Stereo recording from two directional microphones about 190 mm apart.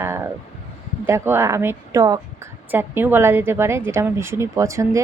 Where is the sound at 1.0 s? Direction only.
10° right (ahead or behind).